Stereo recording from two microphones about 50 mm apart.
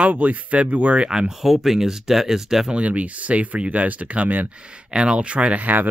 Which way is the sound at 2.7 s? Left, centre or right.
Right.